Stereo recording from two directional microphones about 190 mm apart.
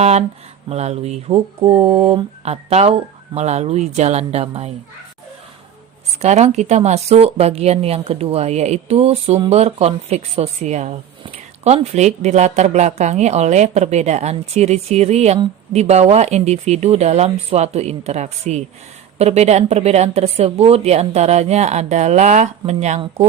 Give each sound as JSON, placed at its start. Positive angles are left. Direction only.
{"t": 0.0, "sound": "speech", "side_deg": -35}
{"t": 6.2, "sound": "speech", "side_deg": -35}